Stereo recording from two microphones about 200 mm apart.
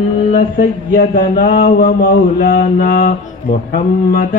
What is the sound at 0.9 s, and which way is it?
Speech, 45° left (ahead or behind).